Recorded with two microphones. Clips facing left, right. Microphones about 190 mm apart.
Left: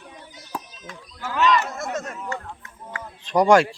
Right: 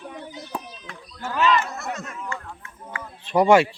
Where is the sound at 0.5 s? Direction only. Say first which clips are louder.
Even; centre (ahead or behind).